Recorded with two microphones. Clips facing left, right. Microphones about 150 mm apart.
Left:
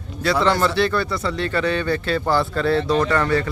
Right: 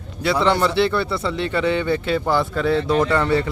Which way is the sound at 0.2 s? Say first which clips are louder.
Even; 20° right (ahead or behind).